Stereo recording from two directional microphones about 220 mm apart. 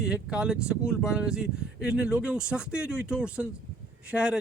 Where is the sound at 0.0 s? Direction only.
5° right (ahead or behind).